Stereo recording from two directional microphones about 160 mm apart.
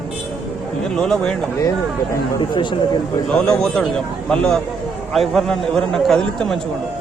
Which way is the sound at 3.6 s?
5° left (ahead or behind).